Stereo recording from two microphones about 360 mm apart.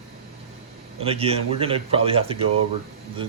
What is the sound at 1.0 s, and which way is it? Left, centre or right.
A man's voice, centre.